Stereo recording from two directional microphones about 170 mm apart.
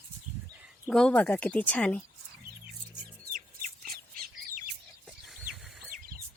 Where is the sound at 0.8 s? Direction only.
5° left (ahead or behind).